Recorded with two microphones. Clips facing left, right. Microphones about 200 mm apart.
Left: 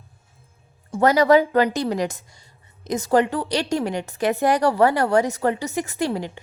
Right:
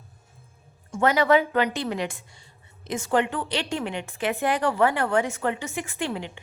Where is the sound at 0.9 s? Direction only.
40° left (ahead or behind).